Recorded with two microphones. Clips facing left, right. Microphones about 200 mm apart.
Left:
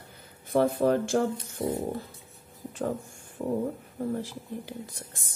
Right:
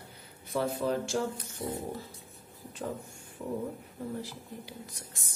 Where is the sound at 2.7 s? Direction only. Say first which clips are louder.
Left 6 dB; 50° left (ahead or behind).